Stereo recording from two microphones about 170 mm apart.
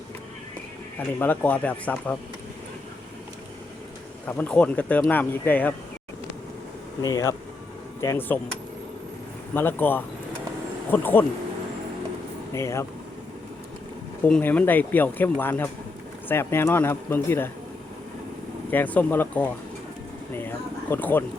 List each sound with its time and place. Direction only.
0.9 s speech: 10° left (ahead or behind)
4.3 s speech: 10° left (ahead or behind)
7.0 s speech: 20° left (ahead or behind)
9.6 s speech: 10° left (ahead or behind)
12.5 s speech: 15° left (ahead or behind)
14.3 s speech: 5° left (ahead or behind)
18.7 s speech: 10° left (ahead or behind)